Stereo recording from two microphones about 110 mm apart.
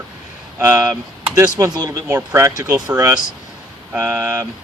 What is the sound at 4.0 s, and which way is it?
Speech, 20° right (ahead or behind).